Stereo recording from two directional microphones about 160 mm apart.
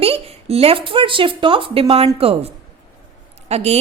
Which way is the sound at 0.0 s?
35° right (ahead or behind).